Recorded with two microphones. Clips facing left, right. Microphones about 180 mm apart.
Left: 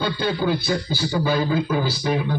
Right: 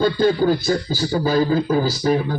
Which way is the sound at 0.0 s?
45° right (ahead or behind).